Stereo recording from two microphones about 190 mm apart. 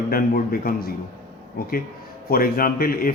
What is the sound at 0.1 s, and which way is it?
A man's voice, 50° left (ahead or behind).